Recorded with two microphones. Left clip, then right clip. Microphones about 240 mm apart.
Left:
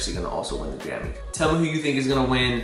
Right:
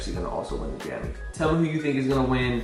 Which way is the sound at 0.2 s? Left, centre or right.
Right.